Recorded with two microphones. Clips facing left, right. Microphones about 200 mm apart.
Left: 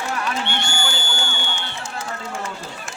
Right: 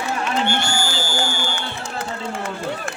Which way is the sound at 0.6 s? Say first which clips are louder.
Right 3 dB; 65° left (ahead or behind).